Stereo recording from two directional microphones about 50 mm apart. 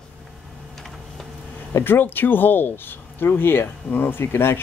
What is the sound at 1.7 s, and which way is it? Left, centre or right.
Speech, left.